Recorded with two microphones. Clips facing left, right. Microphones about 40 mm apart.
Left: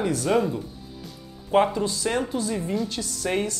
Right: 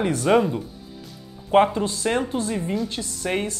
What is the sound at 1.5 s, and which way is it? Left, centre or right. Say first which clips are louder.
Speech: right 3 dB; right.